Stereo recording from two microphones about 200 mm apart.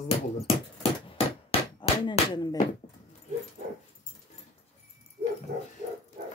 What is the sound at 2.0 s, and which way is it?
Speech, 20° left (ahead or behind).